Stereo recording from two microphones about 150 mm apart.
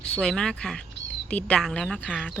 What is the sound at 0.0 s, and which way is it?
Speech, 5° left (ahead or behind).